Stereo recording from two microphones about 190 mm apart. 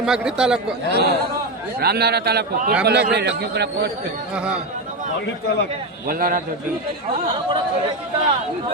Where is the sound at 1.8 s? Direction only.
55° right (ahead or behind).